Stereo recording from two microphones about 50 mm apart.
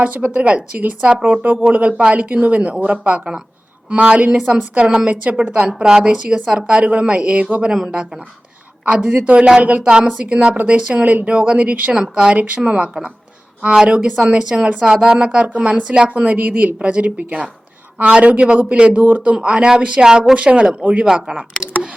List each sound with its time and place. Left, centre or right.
0.0 s a woman's voice: right
7.7 s speech: centre
9.0 s a woman's voice: right
12.1 s a woman's voice: centre